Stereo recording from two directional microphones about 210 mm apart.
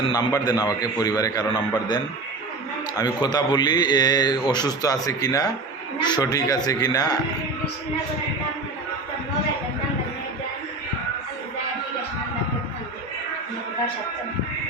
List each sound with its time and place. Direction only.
0.1 s a man's voice: 20° left (ahead or behind)